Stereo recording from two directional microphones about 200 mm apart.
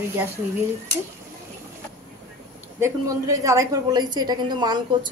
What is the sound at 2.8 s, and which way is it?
A woman's voice, 15° right (ahead or behind).